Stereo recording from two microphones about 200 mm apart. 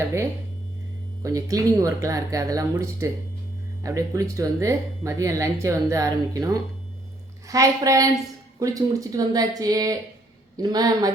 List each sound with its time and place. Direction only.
1.2 s speech: 15° right (ahead or behind)